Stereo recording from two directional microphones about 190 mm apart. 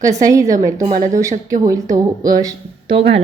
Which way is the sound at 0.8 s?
35° right (ahead or behind).